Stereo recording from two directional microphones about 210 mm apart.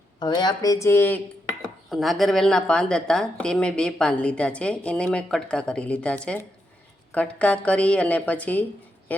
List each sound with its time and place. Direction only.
0.2 s a woman's voice: 20° left (ahead or behind)
1.9 s a woman's voice: centre (ahead or behind)